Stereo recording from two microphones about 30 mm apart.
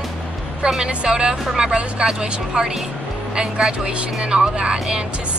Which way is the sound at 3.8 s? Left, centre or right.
Right.